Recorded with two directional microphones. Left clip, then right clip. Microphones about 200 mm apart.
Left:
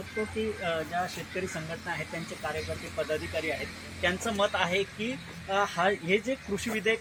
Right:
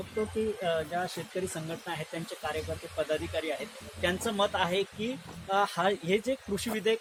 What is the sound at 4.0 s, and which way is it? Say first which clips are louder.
Speech: left 1 dB; 20° right (ahead or behind).